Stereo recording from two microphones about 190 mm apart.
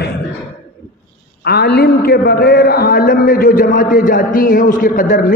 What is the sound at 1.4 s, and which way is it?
A man's voice, 60° left (ahead or behind).